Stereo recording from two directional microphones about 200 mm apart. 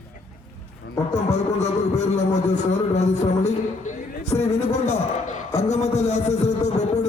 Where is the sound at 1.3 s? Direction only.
35° left (ahead or behind).